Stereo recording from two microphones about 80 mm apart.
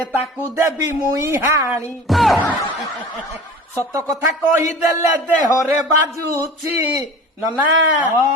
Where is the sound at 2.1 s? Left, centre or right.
Centre.